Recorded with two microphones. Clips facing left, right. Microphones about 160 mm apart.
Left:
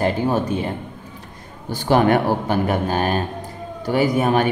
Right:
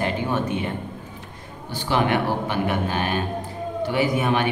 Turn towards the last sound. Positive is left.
turn(degrees=40)  # may be behind; listen again after turning